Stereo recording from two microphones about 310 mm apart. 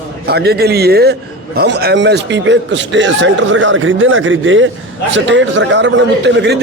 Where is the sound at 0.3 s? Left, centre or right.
Right.